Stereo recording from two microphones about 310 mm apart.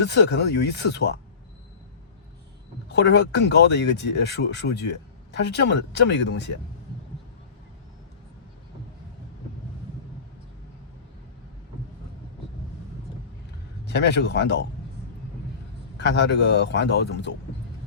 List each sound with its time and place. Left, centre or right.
0.0 s speech: left
2.9 s speech: left
13.8 s speech: left
16.0 s speech: left